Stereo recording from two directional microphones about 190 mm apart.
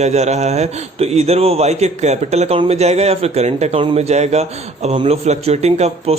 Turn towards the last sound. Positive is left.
turn(degrees=-35)  # may be behind; listen again after turning